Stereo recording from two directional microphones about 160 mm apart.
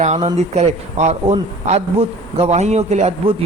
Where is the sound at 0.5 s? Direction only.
45° right (ahead or behind).